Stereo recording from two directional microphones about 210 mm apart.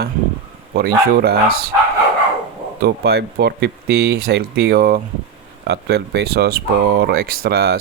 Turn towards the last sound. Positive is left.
turn(degrees=-50)  # may be behind; listen again after turning